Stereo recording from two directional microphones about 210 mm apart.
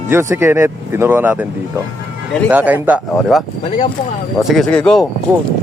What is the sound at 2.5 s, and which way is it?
A man's voice, 10° right (ahead or behind).